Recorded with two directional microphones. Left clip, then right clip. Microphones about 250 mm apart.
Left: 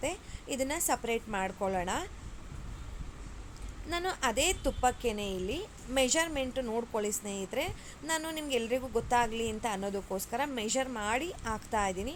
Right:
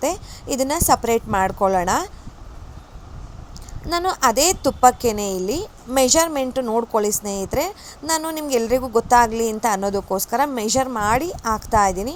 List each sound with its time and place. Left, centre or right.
0.0 s a woman's voice: right
3.8 s a woman's voice: right